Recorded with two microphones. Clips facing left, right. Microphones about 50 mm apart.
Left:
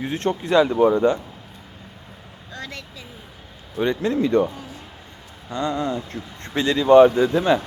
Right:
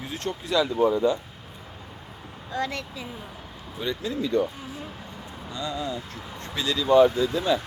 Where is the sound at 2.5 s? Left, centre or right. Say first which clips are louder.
Right 6 dB; centre.